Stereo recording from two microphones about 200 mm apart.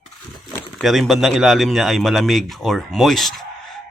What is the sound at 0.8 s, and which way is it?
Speech, centre (ahead or behind).